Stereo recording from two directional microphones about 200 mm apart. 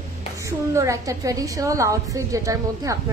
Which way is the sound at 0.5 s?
15° right (ahead or behind).